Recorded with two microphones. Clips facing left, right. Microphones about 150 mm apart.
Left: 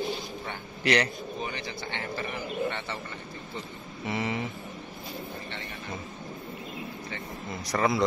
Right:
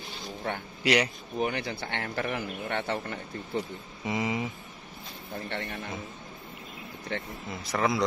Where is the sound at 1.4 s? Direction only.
60° right (ahead or behind).